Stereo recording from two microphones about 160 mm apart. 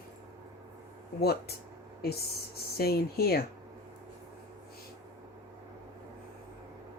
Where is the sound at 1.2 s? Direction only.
80° left.